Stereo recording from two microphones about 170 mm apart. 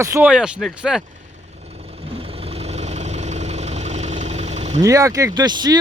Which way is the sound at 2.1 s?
35° right (ahead or behind).